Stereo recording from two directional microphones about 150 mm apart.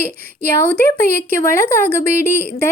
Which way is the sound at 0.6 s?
10° left (ahead or behind).